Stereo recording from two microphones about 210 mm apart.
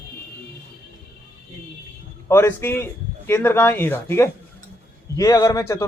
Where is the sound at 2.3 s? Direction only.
10° left (ahead or behind).